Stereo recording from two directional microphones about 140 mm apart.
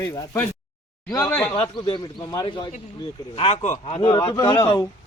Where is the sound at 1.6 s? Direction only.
35° left (ahead or behind).